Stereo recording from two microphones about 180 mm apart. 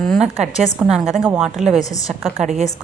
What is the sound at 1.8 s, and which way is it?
Speech, 20° left (ahead or behind).